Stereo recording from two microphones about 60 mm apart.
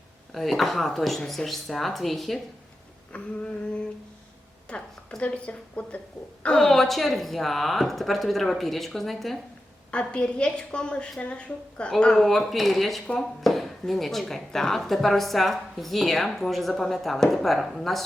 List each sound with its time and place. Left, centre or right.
0.3 s speech: centre
3.1 s speech: left
4.7 s a woman's voice: centre
9.9 s a woman's voice: centre